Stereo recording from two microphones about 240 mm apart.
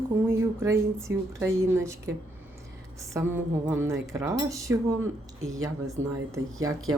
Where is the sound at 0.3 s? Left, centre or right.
Centre.